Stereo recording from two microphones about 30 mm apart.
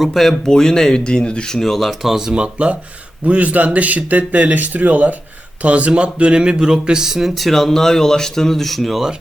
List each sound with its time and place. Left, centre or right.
0.0 s speech: centre
0.4 s speech: left
1.0 s speech: left
1.5 s speech: centre
1.7 s speech: centre
2.0 s speech: centre
2.3 s speech: right
3.2 s speech: right
5.6 s speech: right; by 7.3 s centre
7.3 s speech: centre
7.7 s speech: centre